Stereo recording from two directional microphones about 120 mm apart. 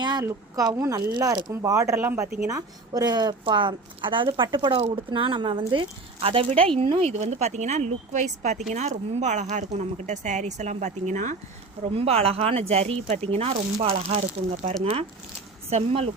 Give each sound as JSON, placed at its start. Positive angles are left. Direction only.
{"t": 0.0, "sound": "a sound", "side_deg": -35}
{"t": 0.3, "sound": "a woman's voice", "side_deg": -30}
{"t": 1.7, "sound": "a woman's voice", "side_deg": -25}
{"t": 6.2, "sound": "speech", "side_deg": -55}
{"t": 11.9, "sound": "speech", "side_deg": -55}
{"t": 15.7, "sound": "speech", "side_deg": -60}